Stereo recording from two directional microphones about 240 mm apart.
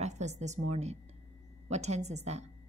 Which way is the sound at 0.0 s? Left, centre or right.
Right.